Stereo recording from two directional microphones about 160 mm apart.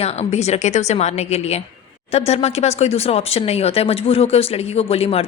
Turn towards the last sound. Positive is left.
turn(degrees=40)  # may be behind; listen again after turning